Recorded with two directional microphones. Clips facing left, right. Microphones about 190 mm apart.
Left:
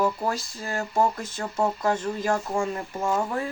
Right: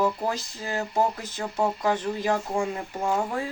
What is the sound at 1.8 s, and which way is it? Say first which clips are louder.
Speech: even; 15° right (ahead or behind).